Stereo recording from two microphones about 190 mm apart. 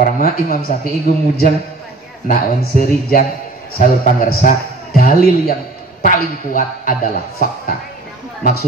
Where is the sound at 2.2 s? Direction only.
50° left (ahead or behind).